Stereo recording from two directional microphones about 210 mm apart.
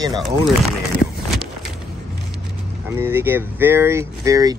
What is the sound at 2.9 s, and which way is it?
Speech, 10° right (ahead or behind).